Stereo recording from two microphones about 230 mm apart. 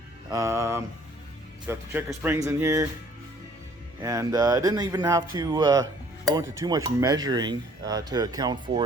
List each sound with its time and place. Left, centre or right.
0.3 s speech: centre
4.0 s speech: centre